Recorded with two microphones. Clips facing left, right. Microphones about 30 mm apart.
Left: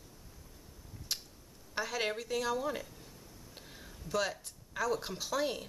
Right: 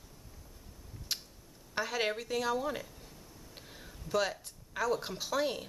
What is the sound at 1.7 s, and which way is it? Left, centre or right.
A woman's voice, centre.